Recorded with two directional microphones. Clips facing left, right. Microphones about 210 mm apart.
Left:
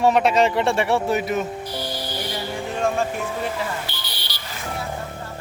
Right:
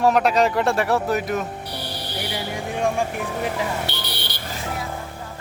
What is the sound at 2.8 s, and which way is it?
Speech, 15° right (ahead or behind).